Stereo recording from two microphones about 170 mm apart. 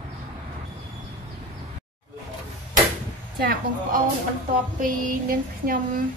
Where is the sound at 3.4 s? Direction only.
55° right (ahead or behind).